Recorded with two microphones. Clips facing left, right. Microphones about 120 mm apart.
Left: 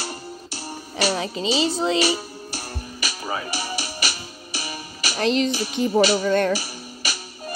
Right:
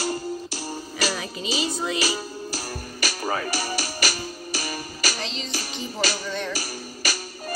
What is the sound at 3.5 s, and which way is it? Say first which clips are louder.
Music: right 1 dB; 40° right (ahead or behind).